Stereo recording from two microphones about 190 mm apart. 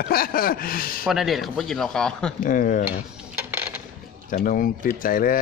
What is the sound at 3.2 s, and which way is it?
Coin, 10° right (ahead or behind).